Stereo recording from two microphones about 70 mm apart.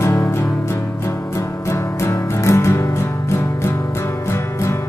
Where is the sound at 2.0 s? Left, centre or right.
Left.